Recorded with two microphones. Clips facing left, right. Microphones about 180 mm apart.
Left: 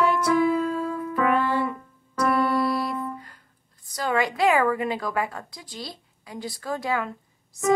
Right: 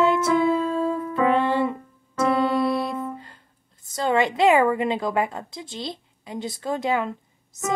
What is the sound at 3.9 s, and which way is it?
A woman's voice, 25° right (ahead or behind).